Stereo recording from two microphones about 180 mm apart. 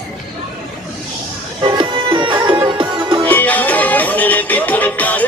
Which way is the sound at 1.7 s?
25° right (ahead or behind).